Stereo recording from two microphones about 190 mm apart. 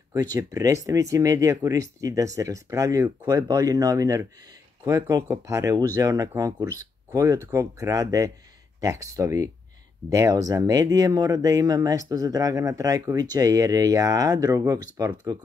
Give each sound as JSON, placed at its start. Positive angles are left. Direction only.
{"t": 0.4, "sound": "speech", "side_deg": -15}